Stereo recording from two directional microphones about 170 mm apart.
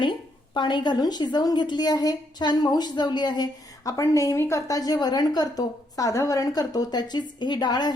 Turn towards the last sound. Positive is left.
turn(degrees=25)  # may be behind; listen again after turning